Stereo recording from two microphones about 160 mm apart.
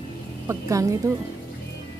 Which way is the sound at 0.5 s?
20° right (ahead or behind).